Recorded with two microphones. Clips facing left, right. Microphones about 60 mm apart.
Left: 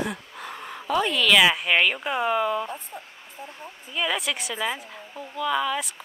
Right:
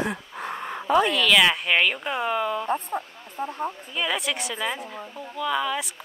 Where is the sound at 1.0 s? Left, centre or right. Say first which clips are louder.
Left 2 dB; centre.